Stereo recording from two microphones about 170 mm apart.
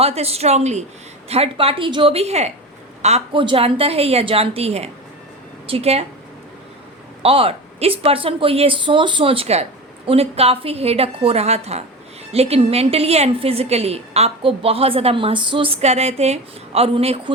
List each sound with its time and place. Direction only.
0.0 s a woman's voice: 35° right (ahead or behind)
7.2 s a woman's voice: 35° right (ahead or behind)